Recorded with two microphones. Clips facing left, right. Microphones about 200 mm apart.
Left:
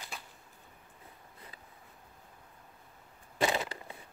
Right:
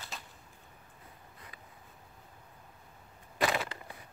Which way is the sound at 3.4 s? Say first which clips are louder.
Left 1 dB; 20° left (ahead or behind).